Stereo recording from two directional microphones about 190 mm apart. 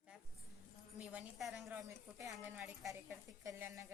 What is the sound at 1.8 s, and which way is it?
Speech, 15° right (ahead or behind).